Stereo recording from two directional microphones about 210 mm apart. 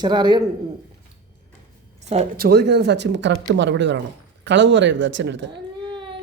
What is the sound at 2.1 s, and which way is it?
Speech, 30° right (ahead or behind).